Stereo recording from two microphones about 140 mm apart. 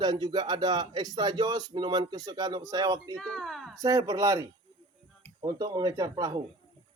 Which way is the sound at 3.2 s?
5° left (ahead or behind).